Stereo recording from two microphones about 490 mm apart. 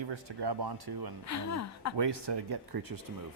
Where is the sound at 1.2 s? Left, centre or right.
Left.